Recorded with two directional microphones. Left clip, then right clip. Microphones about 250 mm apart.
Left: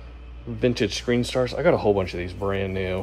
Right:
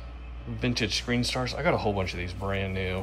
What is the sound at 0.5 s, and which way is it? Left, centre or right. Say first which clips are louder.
Speech: left 5 dB; centre.